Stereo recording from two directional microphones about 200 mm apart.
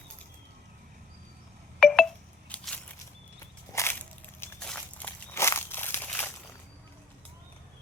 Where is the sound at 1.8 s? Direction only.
5° left (ahead or behind).